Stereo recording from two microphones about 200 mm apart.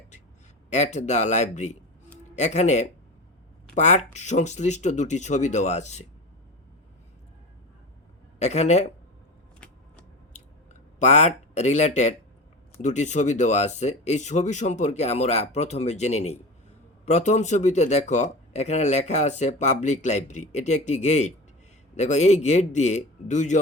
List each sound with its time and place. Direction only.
0.7 s speech: 35° left (ahead or behind)
8.4 s speech: 35° left (ahead or behind)
9.6 s a sound: 5° left (ahead or behind)
11.0 s speech: 35° left (ahead or behind)